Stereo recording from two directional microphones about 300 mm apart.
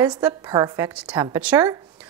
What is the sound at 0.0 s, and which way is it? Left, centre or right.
A woman's voice, centre.